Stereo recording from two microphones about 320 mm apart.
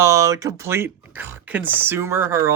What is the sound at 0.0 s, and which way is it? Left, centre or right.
Speech, centre.